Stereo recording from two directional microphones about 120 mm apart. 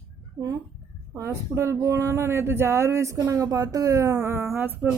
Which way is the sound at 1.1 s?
25° right (ahead or behind).